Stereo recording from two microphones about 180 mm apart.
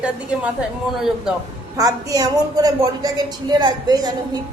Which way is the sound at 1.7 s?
20° right (ahead or behind).